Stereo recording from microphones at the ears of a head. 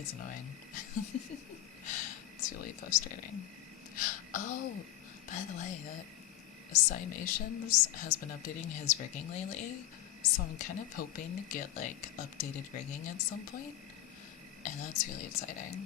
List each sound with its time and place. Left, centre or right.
0.0 s a woman's voice: left